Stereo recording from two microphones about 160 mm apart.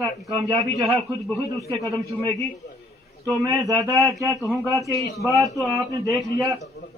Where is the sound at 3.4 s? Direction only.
20° right (ahead or behind).